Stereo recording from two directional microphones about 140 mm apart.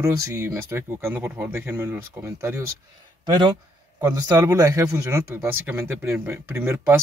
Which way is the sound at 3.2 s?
35° right (ahead or behind).